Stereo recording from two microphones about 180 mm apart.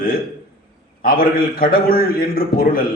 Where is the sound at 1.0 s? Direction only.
55° left (ahead or behind).